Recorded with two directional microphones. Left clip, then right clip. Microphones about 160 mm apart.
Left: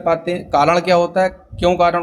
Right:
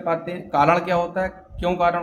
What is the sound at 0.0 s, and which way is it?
Speech, 40° left (ahead or behind).